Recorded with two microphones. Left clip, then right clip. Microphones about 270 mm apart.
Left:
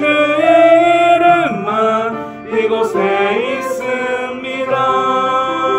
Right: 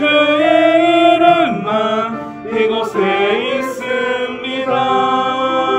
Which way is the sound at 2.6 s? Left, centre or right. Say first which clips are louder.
Left 1 dB; centre.